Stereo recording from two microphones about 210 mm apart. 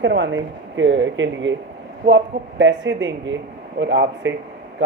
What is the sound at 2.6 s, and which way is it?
Speech, 60° right (ahead or behind).